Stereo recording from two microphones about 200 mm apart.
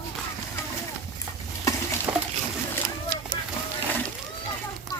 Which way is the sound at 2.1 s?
5° right (ahead or behind).